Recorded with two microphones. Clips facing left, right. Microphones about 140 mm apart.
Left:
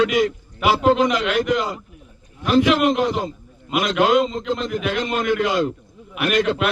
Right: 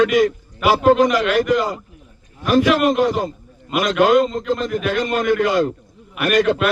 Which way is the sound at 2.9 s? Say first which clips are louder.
Right 3 dB; centre (ahead or behind).